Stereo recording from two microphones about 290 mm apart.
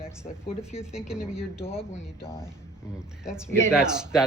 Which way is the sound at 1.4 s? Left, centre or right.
Centre.